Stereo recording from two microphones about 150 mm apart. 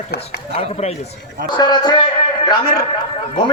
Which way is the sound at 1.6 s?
30° left (ahead or behind).